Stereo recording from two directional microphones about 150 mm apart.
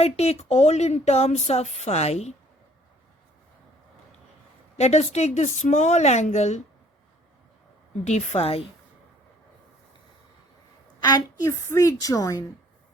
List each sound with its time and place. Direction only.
0.0 s speech: 45° left (ahead or behind)
4.8 s speech: 45° left (ahead or behind)
8.0 s speech: 50° left (ahead or behind)
11.0 s a woman's voice: 30° left (ahead or behind)